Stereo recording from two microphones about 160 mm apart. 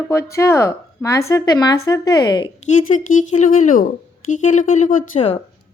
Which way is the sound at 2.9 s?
50° left (ahead or behind).